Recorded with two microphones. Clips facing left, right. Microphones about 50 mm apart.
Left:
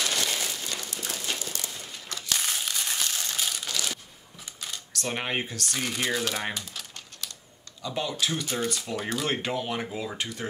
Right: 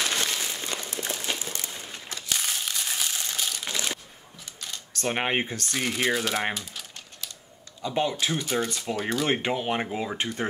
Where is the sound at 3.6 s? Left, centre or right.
Right.